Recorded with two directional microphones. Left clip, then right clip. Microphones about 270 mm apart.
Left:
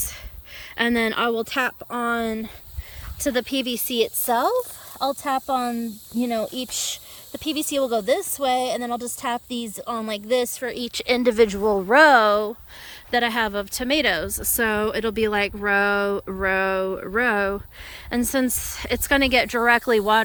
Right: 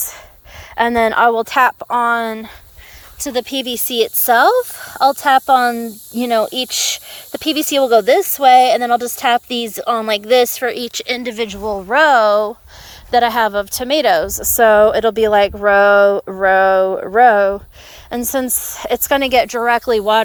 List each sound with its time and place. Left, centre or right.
0.8 s speech: centre
14.3 s speech: centre
14.5 s speech: centre